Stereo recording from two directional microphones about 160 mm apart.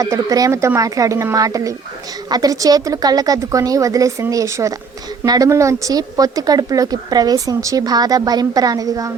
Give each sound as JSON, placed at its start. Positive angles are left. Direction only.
{"t": 0.0, "sound": "speech", "side_deg": -20}